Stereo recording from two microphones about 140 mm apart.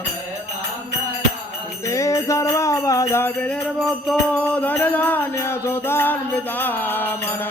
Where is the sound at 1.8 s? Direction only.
20° left (ahead or behind).